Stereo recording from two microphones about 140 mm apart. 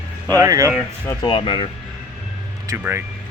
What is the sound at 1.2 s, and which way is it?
Speech, 40° left (ahead or behind).